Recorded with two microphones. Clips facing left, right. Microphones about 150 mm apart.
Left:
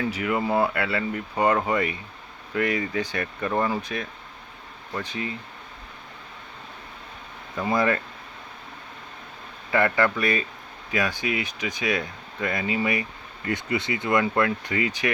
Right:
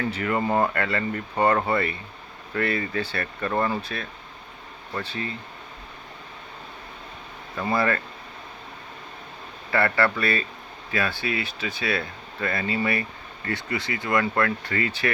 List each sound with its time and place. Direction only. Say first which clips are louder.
0.0 s speech: even; 10° left (ahead or behind)
7.5 s speech: left 1 dB; 15° left (ahead or behind)
9.7 s speech: left 1 dB; 15° left (ahead or behind)